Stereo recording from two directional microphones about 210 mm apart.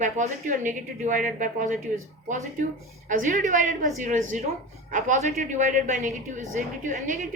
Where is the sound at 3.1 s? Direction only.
35° right (ahead or behind).